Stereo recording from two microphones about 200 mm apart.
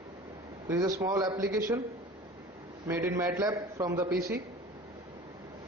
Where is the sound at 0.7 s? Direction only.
15° right (ahead or behind).